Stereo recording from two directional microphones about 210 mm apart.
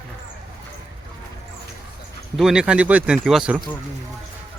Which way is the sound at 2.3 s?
5° right (ahead or behind).